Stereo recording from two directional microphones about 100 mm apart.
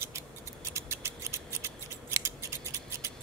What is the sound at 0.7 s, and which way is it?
Scissors, 25° right (ahead or behind).